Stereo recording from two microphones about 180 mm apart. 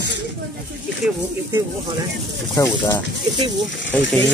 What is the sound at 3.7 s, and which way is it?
Speech, 90° left.